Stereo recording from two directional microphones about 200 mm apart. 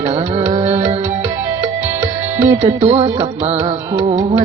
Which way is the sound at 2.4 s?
35° right (ahead or behind).